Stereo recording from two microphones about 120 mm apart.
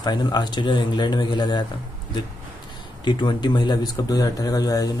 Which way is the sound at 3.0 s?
40° left (ahead or behind).